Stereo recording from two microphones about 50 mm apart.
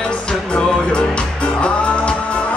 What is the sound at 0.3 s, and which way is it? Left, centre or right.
Music, centre.